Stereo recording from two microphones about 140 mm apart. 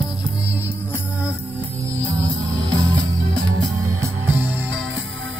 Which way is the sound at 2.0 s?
30° right (ahead or behind).